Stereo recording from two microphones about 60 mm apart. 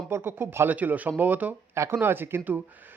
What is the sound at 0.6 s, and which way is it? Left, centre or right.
A man's voice, right.